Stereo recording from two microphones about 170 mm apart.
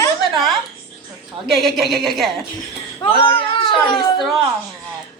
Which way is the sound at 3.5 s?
25° left (ahead or behind).